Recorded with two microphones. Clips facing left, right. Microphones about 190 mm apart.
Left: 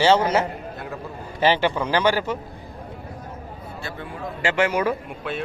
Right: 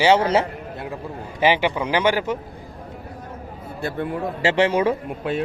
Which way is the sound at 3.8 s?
55° right (ahead or behind).